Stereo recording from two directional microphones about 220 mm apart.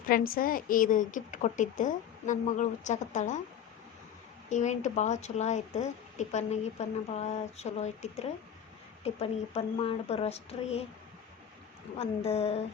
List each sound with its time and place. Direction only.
0.1 s speech: 40° left (ahead or behind)
4.4 s speech: 35° left (ahead or behind)
11.9 s speech: 30° left (ahead or behind)